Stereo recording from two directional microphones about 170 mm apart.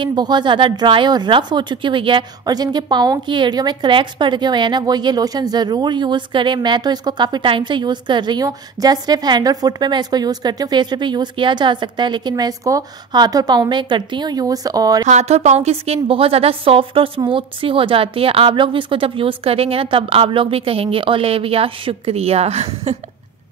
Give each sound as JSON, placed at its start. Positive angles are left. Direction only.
{"t": 0.0, "sound": "a woman's voice", "side_deg": -25}
{"t": 15.0, "sound": "a woman's voice", "side_deg": -40}